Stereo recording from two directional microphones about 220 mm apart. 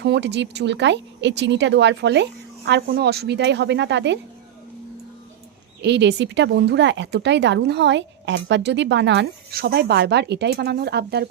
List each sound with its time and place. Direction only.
0.0 s speech: 50° right (ahead or behind)
5.8 s speech: 50° right (ahead or behind)